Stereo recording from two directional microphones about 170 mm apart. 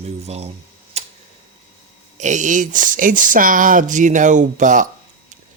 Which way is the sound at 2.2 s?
45° right (ahead or behind).